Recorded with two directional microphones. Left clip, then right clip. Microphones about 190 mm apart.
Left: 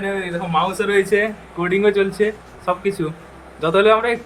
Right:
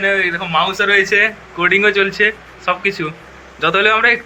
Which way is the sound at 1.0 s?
20° left (ahead or behind).